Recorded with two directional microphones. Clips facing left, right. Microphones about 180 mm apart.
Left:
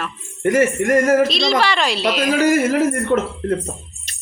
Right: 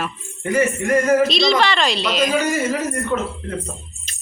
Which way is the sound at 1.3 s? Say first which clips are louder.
Right 1 dB; centre (ahead or behind).